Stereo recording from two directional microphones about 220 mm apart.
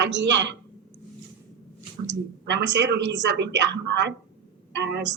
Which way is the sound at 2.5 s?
55° right (ahead or behind).